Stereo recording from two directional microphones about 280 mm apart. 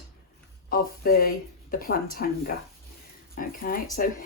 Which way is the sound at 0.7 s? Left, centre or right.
Left.